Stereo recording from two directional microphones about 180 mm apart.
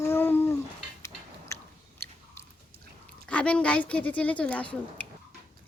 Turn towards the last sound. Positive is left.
turn(degrees=5)  # may be behind; listen again after turning